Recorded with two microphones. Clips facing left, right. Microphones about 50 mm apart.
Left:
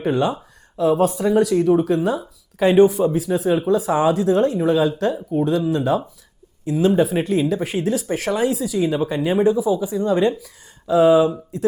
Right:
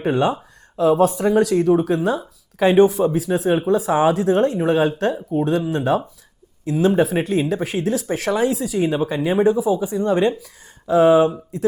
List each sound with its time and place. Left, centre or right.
0.0 s speech: right